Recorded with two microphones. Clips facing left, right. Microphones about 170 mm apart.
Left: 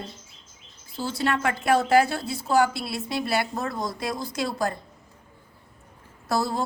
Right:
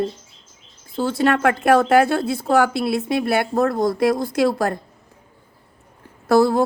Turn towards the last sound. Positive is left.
turn(degrees=-60)  # may be behind; listen again after turning